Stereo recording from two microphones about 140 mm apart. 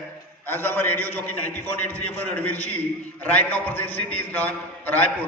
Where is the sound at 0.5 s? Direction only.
15° left (ahead or behind).